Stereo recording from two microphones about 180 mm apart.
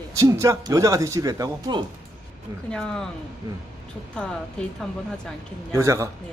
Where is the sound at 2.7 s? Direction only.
5° left (ahead or behind).